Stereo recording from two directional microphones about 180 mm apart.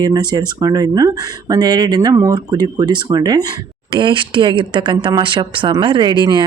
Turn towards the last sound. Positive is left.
turn(degrees=-25)  # may be behind; listen again after turning